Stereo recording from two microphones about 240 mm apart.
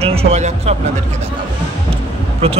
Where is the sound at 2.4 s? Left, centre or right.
Right.